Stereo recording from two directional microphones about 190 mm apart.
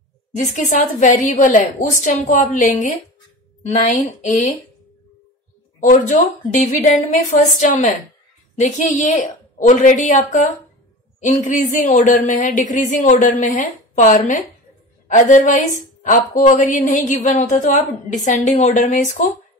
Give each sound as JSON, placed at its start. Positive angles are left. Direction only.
{"t": 0.7, "sound": "speech", "side_deg": 40}
{"t": 5.8, "sound": "speech", "side_deg": 40}